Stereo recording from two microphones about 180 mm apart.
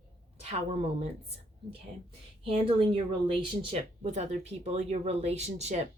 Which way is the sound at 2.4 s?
35° right (ahead or behind).